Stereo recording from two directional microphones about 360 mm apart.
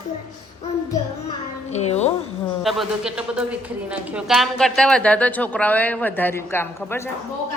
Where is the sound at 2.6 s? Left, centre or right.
Centre.